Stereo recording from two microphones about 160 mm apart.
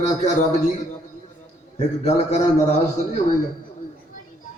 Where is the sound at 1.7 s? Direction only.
45° left (ahead or behind).